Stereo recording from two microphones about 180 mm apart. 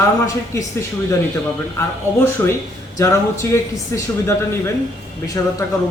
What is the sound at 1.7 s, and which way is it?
Speech, 15° left (ahead or behind).